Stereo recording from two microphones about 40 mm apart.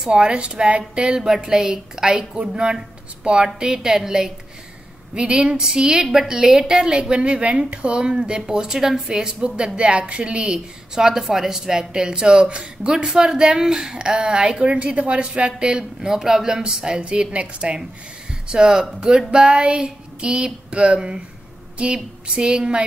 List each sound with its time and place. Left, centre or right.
0.1 s a woman's voice: right
5.1 s a woman's voice: right; by 9.1 s centre
9.1 s a woman's voice: right
13.0 s a woman's voice: centre